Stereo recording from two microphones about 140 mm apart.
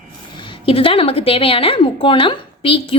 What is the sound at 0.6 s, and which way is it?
A woman's voice, 40° left (ahead or behind).